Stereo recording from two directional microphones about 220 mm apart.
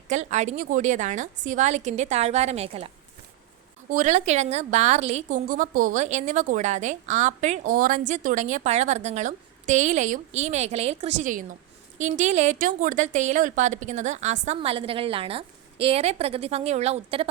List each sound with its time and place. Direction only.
0.1 s a woman's voice: 35° right (ahead or behind)